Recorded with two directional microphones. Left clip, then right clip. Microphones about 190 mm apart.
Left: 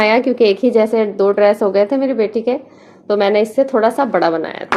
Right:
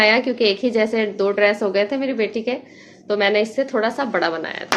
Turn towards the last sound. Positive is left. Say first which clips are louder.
# left 6 dB
turn(degrees=45)  # may be behind; listen again after turning